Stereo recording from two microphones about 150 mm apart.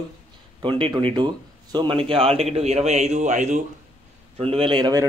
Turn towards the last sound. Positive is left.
turn(degrees=-30)  # may be behind; listen again after turning